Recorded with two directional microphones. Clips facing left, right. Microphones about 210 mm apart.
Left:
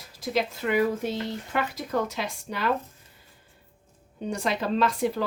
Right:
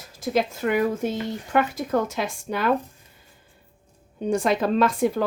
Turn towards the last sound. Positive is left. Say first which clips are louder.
# right 4 dB
turn(degrees=-50)  # may be behind; listen again after turning